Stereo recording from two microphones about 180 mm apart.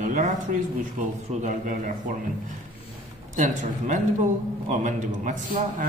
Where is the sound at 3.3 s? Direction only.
45° right (ahead or behind).